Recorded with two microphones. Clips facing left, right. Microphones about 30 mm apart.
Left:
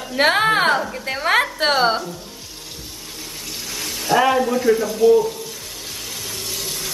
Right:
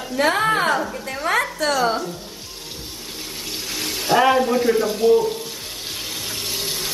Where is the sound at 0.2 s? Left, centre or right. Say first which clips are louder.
Left 2 dB; left.